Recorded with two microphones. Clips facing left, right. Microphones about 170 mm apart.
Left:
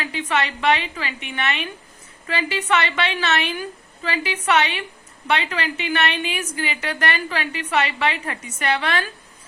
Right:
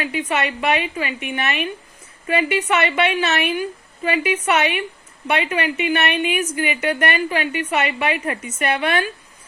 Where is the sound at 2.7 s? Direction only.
20° right (ahead or behind).